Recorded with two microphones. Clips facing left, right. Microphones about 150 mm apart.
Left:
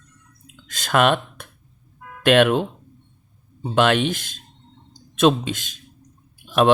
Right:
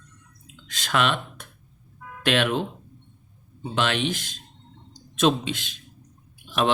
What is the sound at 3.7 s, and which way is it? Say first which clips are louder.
Speech: left 7 dB; 50° left (ahead or behind).